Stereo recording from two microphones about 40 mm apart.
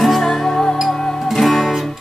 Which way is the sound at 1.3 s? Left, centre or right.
Centre.